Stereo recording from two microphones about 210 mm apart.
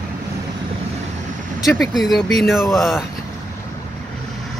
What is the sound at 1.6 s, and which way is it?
Speech, centre (ahead or behind).